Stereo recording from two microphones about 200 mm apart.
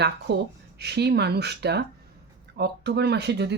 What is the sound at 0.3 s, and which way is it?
Speech, 55° right (ahead or behind).